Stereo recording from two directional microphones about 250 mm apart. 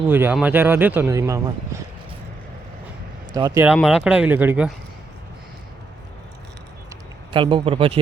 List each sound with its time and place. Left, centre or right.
0.1 s speech: centre
3.3 s speech: centre
7.3 s speech: centre